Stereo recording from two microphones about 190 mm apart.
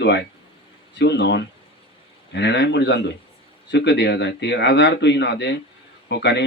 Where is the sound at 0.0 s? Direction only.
65° left (ahead or behind).